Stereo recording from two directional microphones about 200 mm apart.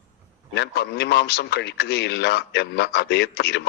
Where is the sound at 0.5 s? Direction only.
55° left (ahead or behind).